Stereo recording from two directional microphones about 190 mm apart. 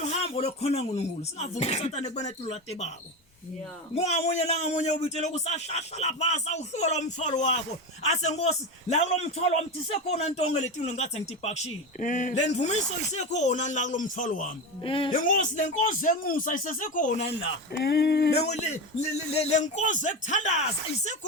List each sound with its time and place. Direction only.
0.2 s a man's voice: 30° left (ahead or behind)
3.9 s a man's voice: 35° left (ahead or behind)
14.8 s speech: 25° left (ahead or behind)
15.1 s speech: 45° left (ahead or behind)
17.7 s speech: 55° left (ahead or behind)
18.3 s a man's voice: 35° left (ahead or behind)